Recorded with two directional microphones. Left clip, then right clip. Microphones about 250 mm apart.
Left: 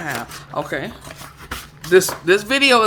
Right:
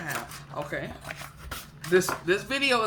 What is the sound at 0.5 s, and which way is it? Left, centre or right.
Shuffling cards, left.